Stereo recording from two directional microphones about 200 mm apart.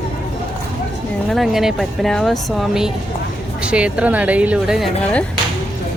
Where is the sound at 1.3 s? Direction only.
Centre (ahead or behind).